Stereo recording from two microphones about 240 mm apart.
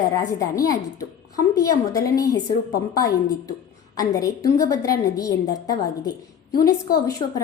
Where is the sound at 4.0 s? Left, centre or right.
Centre.